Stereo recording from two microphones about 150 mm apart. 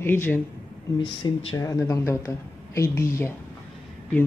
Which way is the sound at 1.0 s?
30° left (ahead or behind).